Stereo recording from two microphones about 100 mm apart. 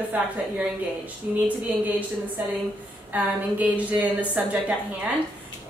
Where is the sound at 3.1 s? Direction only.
15° right (ahead or behind).